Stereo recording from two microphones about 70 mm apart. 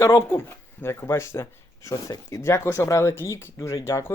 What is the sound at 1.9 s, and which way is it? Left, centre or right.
Speech, left.